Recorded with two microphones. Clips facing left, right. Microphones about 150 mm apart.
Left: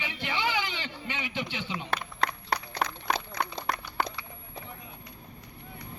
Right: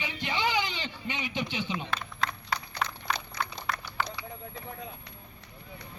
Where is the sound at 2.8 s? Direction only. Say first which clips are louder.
Left 2 dB; 50° left (ahead or behind).